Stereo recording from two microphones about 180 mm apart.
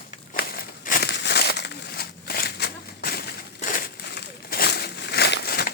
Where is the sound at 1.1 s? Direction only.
70° left (ahead or behind).